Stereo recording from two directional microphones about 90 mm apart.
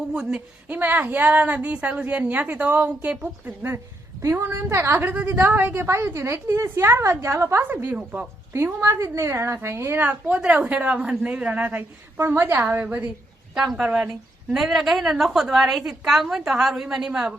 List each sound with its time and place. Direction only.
0.1 s speech: 10° right (ahead or behind)
4.4 s a woman's voice: 30° right (ahead or behind); by 8.3 s 15° right (ahead or behind)
8.5 s a woman's voice: 30° right (ahead or behind)
13.5 s a woman's voice: 5° right (ahead or behind)